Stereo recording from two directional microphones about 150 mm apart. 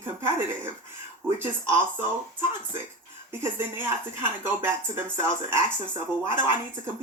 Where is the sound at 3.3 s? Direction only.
15° right (ahead or behind).